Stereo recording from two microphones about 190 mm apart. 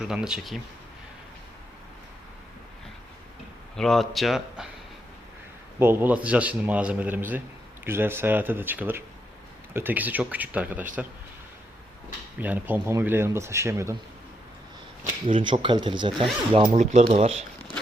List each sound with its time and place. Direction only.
0.0 s a man's voice: 5° right (ahead or behind)
3.8 s a man's voice: centre (ahead or behind)
5.8 s a man's voice: 10° right (ahead or behind)
12.4 s a man's voice: 10° right (ahead or behind)
15.3 s speech: 25° right (ahead or behind)